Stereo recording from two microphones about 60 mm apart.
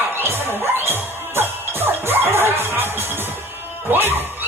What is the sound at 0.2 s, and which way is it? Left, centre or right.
Music, right.